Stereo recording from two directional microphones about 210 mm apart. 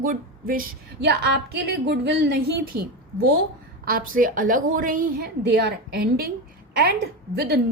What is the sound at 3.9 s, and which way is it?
A woman's voice, 40° right (ahead or behind).